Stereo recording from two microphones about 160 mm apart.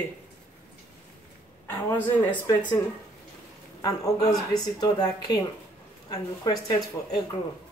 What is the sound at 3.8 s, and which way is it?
A man's voice, 25° left (ahead or behind).